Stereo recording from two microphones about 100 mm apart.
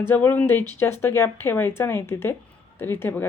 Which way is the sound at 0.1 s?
20° left (ahead or behind).